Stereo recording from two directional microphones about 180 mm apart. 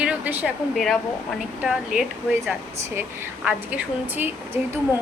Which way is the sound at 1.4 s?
5° right (ahead or behind).